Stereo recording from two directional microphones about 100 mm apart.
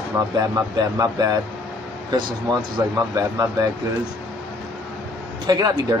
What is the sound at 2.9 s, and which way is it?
Speech, 35° right (ahead or behind).